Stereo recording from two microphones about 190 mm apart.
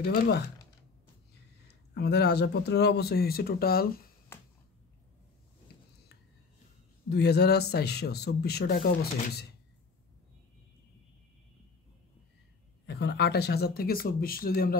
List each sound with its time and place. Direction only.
0.0 s speech: 55° left (ahead or behind)
1.7 s speech: 60° left (ahead or behind)
4.3 s a sound: 15° left (ahead or behind)
7.1 s speech: 55° left (ahead or behind)
12.8 s speech: 60° left (ahead or behind)